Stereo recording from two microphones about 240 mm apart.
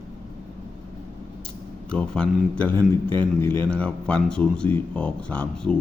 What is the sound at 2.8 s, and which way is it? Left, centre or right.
Speech, centre.